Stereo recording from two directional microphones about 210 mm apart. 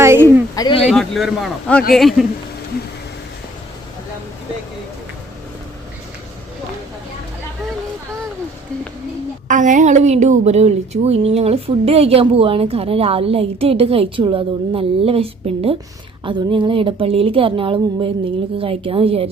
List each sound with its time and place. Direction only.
0.0 s a sound: 10° right (ahead or behind)
0.5 s speech: 15° left (ahead or behind)
0.9 s a man's voice: centre (ahead or behind)
9.5 s a woman's voice: 35° right (ahead or behind)